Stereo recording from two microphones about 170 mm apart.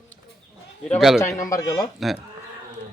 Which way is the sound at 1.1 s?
20° left (ahead or behind).